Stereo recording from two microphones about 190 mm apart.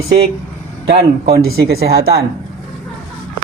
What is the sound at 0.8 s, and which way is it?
Speech, 55° right (ahead or behind).